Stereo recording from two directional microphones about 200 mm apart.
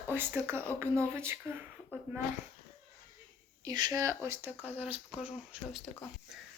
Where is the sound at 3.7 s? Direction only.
20° right (ahead or behind); by 5.9 s centre (ahead or behind).